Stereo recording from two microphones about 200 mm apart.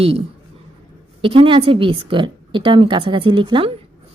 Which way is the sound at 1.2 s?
25° right (ahead or behind).